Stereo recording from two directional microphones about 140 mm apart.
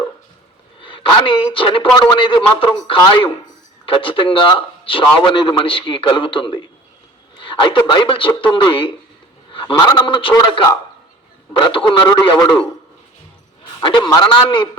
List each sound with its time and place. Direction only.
0.8 s a woman's voice: 35° left (ahead or behind)
11.5 s a man's voice: 35° left (ahead or behind)
13.8 s a man's voice: 35° left (ahead or behind)